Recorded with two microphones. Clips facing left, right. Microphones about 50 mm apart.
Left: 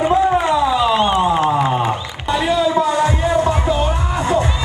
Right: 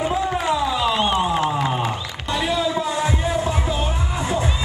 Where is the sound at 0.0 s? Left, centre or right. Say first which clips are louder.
Left 7 dB; centre.